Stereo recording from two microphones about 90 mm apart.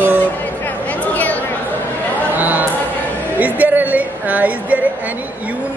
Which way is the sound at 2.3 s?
20° right (ahead or behind).